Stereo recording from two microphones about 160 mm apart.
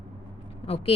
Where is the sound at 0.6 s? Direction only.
40° left (ahead or behind).